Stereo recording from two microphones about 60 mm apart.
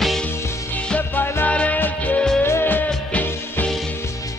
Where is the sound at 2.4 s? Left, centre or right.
Left.